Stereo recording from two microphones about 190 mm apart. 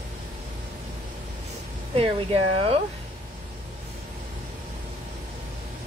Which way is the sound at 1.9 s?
30° right (ahead or behind).